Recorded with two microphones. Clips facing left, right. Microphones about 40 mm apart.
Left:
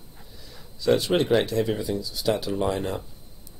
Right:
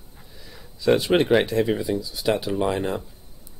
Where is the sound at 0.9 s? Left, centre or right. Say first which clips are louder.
Right 3 dB; right.